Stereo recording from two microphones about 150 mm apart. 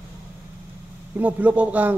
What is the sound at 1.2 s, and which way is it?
Speech, 10° right (ahead or behind).